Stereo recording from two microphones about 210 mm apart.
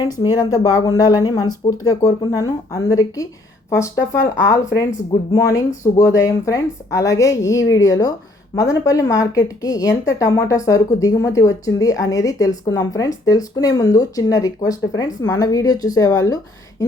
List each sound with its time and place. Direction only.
0.0 s speech: 20° left (ahead or behind)